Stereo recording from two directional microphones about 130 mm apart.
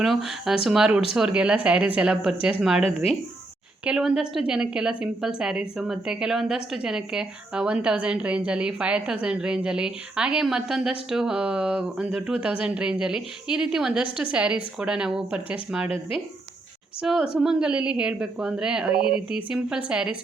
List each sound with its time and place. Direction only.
0.0 s a woman's voice: centre (ahead or behind)
2.8 s speech: 50° left (ahead or behind)
3.8 s a woman's voice: 5° right (ahead or behind)
15.9 s speech: 45° left (ahead or behind)
17.0 s a woman's voice: 5° right (ahead or behind)